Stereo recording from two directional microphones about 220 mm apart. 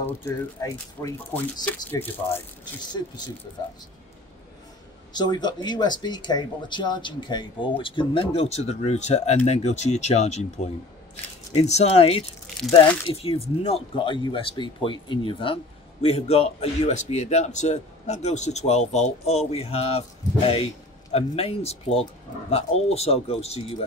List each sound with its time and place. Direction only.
0.0 s speech: 10° left (ahead or behind)
5.1 s speech: 20° left (ahead or behind)